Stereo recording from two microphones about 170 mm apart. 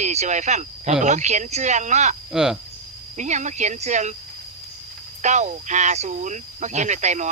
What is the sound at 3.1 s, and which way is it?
Speech, 45° right (ahead or behind).